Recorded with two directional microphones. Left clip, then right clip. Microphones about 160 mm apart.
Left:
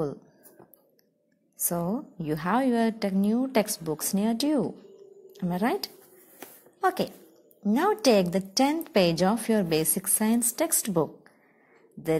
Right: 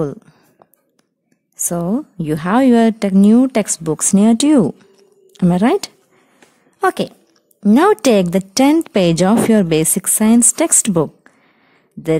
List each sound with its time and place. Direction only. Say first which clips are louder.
1.7 s a woman's voice: right 10 dB; 45° right (ahead or behind)
2.1 s speech: right 11 dB; 80° right
9.9 s speech: right 13 dB; 70° right (ahead or behind); by 11.1 s 90° right